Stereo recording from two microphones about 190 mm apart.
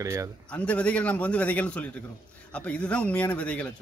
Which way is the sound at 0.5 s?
5° left (ahead or behind).